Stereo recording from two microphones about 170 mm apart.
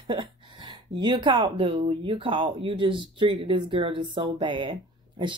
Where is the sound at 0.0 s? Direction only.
30° right (ahead or behind).